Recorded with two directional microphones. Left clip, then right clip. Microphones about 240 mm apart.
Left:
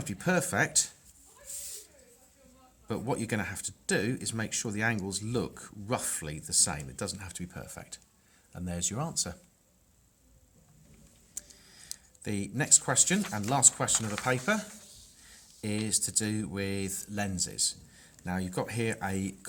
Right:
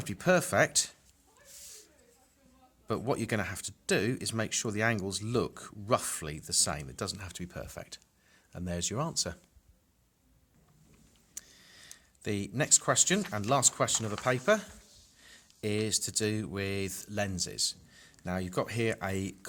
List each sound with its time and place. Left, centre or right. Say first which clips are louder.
0.0 s speech: right 3 dB; right
2.8 s speech: right 1 dB; right
11.3 s a sound: left 1 dB; right
12.2 s speech: right 1 dB; right